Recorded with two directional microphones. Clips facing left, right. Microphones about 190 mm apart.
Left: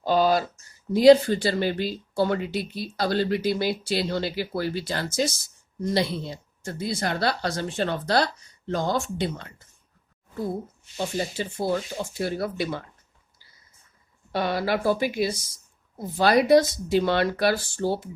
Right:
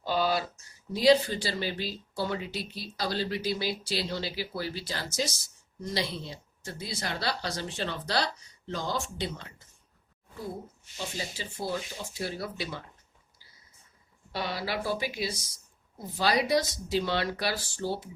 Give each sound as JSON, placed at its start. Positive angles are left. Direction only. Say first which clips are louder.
{"t": 0.0, "sound": "a sound", "louder": "left 7 dB", "side_deg": 45}
{"t": 0.9, "sound": "speech", "louder": "left 8 dB", "side_deg": 50}
{"t": 10.9, "sound": "speech", "louder": "left 9 dB", "side_deg": 55}
{"t": 14.3, "sound": "speech", "louder": "left 8 dB", "side_deg": 50}